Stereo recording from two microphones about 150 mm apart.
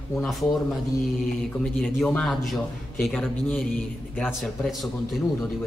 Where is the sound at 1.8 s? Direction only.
5° left (ahead or behind).